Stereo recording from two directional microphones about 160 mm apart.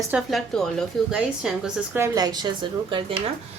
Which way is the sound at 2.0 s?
25° right (ahead or behind).